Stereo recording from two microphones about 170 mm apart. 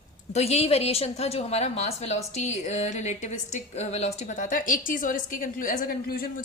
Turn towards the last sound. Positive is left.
turn(degrees=60)  # may be behind; listen again after turning